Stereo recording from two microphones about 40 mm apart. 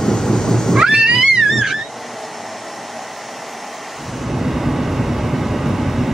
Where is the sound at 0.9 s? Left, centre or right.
Centre.